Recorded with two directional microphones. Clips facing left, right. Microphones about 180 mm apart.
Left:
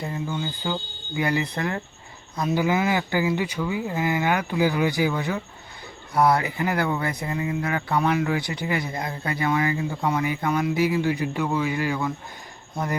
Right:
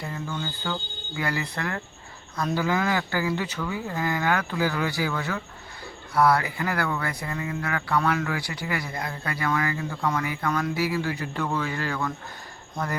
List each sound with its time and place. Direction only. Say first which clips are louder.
0.3 s speech: left 3 dB; 10° left (ahead or behind)